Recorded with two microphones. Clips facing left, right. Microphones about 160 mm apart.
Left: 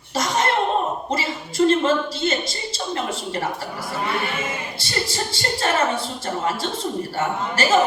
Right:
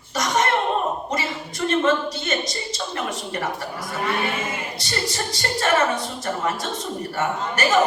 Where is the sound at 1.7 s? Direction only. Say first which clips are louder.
Right 2 dB; 30° left (ahead or behind).